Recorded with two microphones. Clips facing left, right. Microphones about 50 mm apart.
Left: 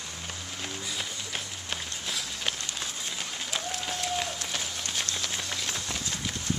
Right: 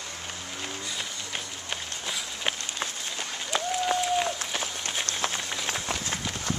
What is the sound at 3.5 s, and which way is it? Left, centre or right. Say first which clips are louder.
Applause: right 9 dB; centre.